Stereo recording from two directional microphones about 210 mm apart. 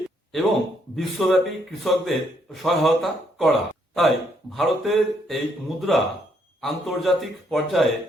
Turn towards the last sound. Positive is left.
turn(degrees=0)  # may be behind; listen again after turning